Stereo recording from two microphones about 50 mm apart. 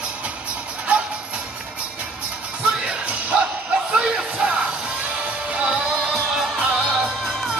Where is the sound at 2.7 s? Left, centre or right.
Right.